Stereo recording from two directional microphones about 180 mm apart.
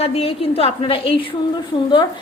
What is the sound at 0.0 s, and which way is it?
A woman's voice, 35° left (ahead or behind).